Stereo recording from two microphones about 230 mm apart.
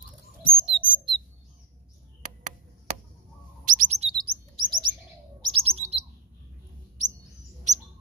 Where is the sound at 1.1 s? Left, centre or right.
Right.